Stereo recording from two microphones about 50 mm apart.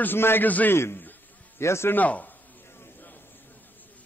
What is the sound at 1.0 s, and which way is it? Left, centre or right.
Insect, left.